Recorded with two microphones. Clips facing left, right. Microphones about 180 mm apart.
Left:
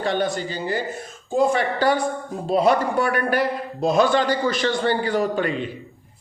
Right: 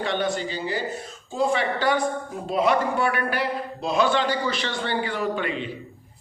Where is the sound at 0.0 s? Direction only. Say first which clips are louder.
Left 2 dB; 40° left (ahead or behind).